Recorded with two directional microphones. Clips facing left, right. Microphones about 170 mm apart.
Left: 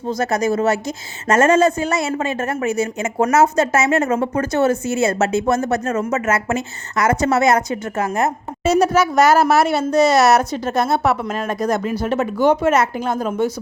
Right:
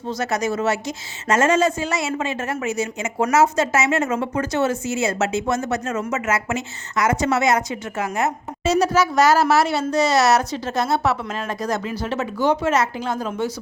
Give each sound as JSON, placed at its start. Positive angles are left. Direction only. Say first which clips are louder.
{"t": 0.2, "sound": "a woman's voice", "louder": "left 4 dB", "side_deg": 50}